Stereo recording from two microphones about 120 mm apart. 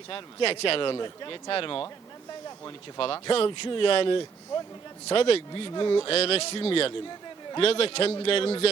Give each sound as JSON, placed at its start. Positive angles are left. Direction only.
{"t": 0.1, "sound": "speech", "side_deg": 50}
{"t": 3.0, "sound": "speech", "side_deg": 45}
{"t": 5.5, "sound": "speech", "side_deg": 40}
{"t": 6.1, "sound": "speech", "side_deg": 55}